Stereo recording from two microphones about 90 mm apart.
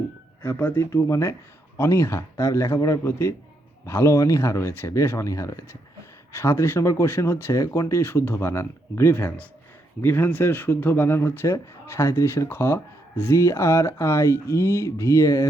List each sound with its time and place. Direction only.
0.4 s speech: 30° left (ahead or behind)